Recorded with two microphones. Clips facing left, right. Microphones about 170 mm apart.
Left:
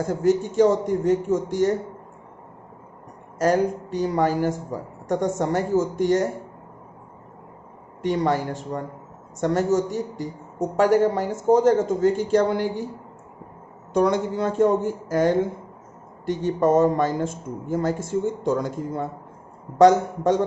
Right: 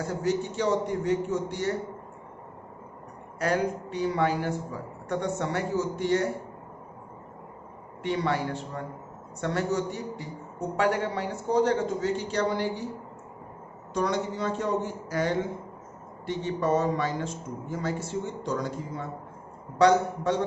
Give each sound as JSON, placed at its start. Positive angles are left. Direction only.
{"t": 0.0, "sound": "speech", "side_deg": 50}
{"t": 3.3, "sound": "speech", "side_deg": 40}
{"t": 8.0, "sound": "speech", "side_deg": 45}
{"t": 13.9, "sound": "speech", "side_deg": 55}